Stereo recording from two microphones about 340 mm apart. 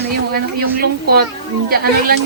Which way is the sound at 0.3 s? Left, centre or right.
Right.